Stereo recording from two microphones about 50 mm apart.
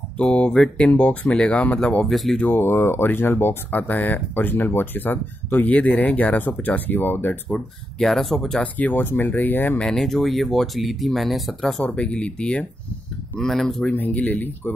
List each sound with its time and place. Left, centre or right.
0.2 s speech: left
2.0 s speech: centre
2.4 s speech: left
3.7 s speech: left
5.8 s speech: left
7.4 s speech: centre
8.7 s speech: left
9.8 s speech: centre
11.8 s speech: centre
13.4 s speech: centre
13.9 s speech: left